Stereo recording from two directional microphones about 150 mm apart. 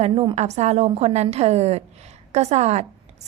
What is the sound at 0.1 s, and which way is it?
Speech, 30° right (ahead or behind).